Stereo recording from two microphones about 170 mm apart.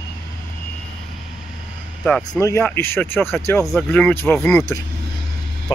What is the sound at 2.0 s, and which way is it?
Speech, 5° left (ahead or behind).